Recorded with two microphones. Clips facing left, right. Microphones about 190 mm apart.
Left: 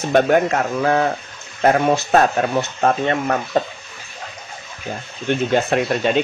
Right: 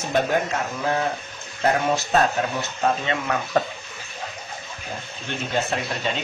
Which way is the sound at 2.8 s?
55° left (ahead or behind).